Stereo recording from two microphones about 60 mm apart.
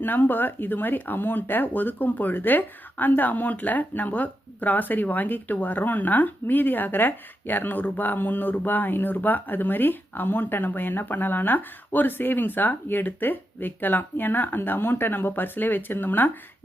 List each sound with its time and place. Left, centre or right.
0.0 s speech: left